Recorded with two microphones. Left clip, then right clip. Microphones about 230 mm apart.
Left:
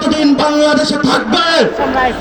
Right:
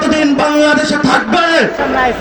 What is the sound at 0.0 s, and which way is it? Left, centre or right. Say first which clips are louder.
Music: even; left.